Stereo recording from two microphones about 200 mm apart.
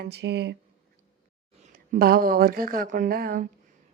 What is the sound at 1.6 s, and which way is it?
A woman's voice, 45° right (ahead or behind).